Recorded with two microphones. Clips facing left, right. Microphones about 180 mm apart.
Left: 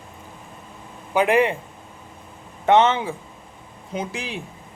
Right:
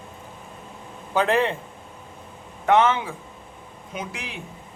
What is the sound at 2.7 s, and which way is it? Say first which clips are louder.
A man's voice: left 2 dB; 25° left (ahead or behind).